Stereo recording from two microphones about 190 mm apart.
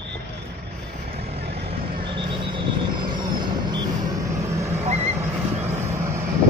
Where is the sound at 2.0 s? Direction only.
25° right (ahead or behind).